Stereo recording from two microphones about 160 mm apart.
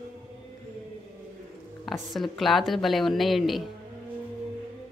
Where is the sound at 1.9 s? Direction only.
Centre (ahead or behind).